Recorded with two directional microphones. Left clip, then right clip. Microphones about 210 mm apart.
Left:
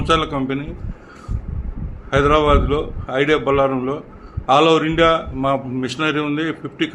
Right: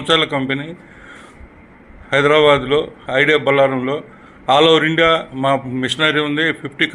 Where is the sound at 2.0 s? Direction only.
10° right (ahead or behind).